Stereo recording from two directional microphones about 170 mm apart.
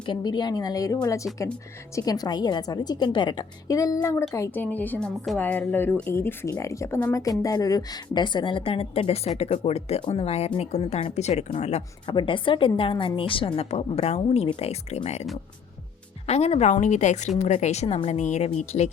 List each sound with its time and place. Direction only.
0.0 s a woman's voice: 25° left (ahead or behind)
12.1 s a woman's voice: 30° left (ahead or behind)